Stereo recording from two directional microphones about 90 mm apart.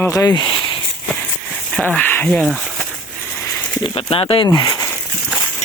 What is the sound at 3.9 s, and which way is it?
Speech, 90° left.